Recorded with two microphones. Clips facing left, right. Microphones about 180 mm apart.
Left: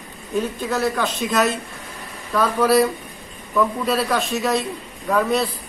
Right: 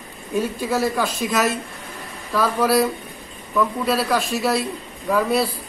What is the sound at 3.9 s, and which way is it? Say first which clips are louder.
A man's voice: even; 5° right (ahead or behind).